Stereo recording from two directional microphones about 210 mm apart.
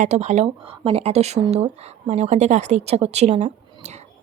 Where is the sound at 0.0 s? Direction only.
35° right (ahead or behind).